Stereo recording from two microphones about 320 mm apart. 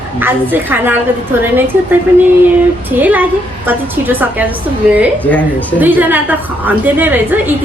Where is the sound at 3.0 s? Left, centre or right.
Centre.